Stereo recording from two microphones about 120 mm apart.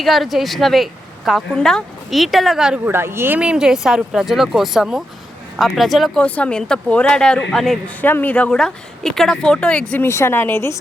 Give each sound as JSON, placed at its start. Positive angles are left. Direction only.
{"t": 0.0, "sound": "speech", "side_deg": 0}
{"t": 2.8, "sound": "speech", "side_deg": -20}
{"t": 6.2, "sound": "speech", "side_deg": 10}
{"t": 8.0, "sound": "speech", "side_deg": 15}
{"t": 9.9, "sound": "speech", "side_deg": 20}